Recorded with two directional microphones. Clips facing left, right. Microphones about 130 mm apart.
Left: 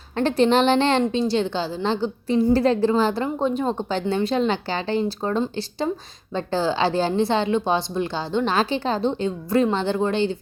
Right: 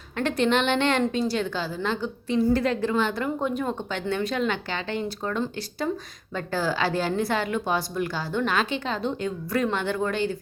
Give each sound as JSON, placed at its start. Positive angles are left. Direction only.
{"t": 0.2, "sound": "a woman's voice", "side_deg": 30}